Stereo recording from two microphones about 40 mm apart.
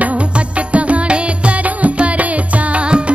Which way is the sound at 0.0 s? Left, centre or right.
Right.